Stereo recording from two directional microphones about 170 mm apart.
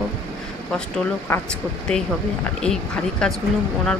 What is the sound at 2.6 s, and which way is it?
Speech, 5° left (ahead or behind).